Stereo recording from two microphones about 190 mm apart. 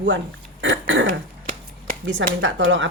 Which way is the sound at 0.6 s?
75° right (ahead or behind).